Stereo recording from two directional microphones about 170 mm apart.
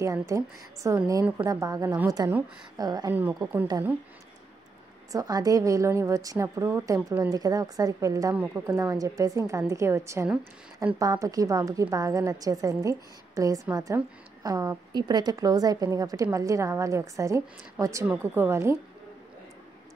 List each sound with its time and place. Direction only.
0.0 s a woman's voice: 15° right (ahead or behind)
5.1 s a woman's voice: 20° right (ahead or behind)
11.0 s a woman's voice: 20° right (ahead or behind)